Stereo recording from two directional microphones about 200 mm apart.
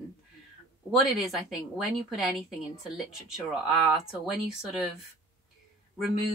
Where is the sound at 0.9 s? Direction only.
Centre (ahead or behind).